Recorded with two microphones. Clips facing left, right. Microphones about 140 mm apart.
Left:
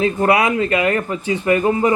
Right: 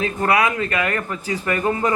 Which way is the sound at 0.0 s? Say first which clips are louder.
Left 4 dB; 25° left (ahead or behind).